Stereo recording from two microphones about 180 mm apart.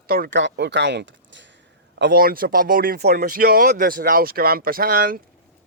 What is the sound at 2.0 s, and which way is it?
A man's voice, 60° right (ahead or behind).